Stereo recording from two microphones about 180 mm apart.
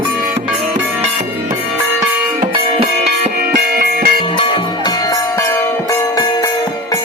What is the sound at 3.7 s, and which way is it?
Music, 55° right (ahead or behind).